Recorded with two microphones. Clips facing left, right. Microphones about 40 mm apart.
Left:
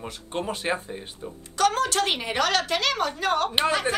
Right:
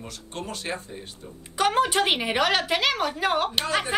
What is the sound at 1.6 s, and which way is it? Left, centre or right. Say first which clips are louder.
A woman's voice: right 1 dB; centre.